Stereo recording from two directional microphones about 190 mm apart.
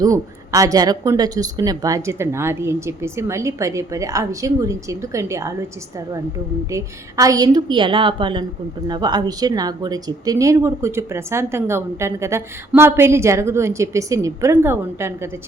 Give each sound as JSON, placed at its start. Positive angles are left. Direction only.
{"t": 0.0, "sound": "speech", "side_deg": -20}
{"t": 6.7, "sound": "a woman's voice", "side_deg": -15}